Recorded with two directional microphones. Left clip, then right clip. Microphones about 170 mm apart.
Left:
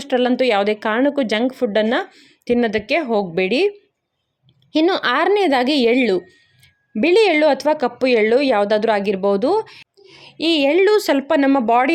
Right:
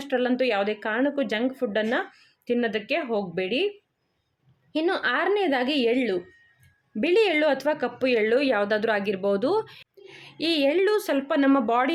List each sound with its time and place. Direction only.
0.0 s speech: 35° left (ahead or behind)
4.7 s speech: 40° left (ahead or behind)